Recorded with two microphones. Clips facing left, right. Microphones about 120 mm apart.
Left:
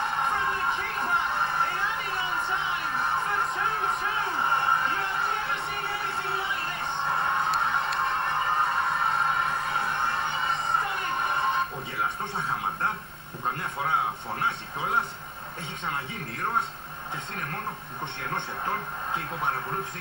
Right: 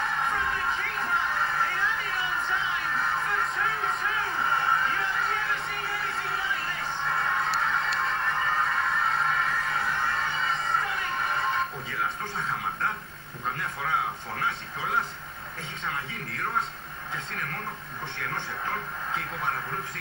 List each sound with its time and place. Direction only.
0.3 s music: 25° left (ahead or behind)
3.0 s music: 25° left (ahead or behind)